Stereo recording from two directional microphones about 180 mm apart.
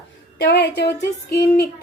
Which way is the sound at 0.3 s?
65° left (ahead or behind).